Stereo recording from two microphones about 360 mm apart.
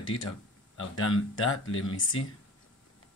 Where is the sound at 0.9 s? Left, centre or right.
Left.